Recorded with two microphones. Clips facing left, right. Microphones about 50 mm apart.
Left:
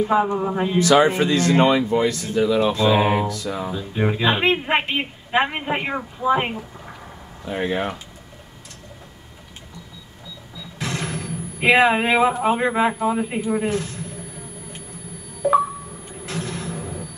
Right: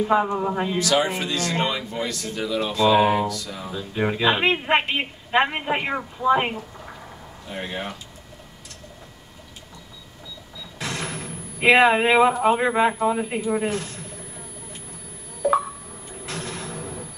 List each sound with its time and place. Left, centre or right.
0.0 s a woman's voice: centre
1.0 s speech: left
2.0 s speech: left
2.9 s speech: centre
3.4 s speech: left
3.7 s a woman's voice: centre
7.6 s speech: left
10.6 s speech: centre
15.4 s a sound: centre